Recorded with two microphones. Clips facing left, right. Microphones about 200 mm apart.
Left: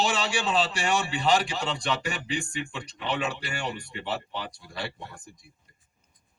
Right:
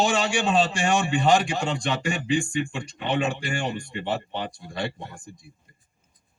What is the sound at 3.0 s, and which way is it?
Speech, 30° right (ahead or behind).